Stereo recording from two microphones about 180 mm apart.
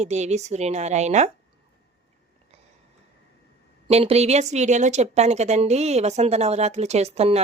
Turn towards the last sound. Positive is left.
turn(degrees=-35)  # may be behind; listen again after turning